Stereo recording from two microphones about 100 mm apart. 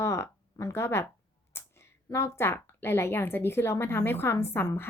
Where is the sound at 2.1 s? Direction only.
25° left (ahead or behind).